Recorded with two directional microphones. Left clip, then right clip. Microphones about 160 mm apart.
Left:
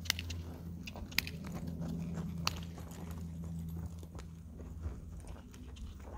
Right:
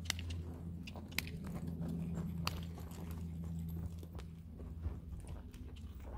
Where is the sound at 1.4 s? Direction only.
5° left (ahead or behind).